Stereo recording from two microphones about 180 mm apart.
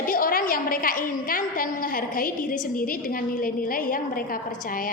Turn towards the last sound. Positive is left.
turn(degrees=50)  # may be behind; listen again after turning